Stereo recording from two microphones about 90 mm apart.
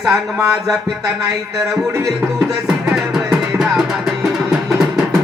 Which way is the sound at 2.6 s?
5° right (ahead or behind).